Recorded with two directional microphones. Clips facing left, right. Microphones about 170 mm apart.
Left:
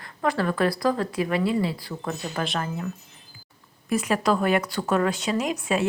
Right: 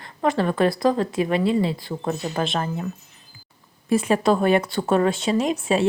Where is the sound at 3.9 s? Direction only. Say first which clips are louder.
Right 4 dB; 30° right (ahead or behind).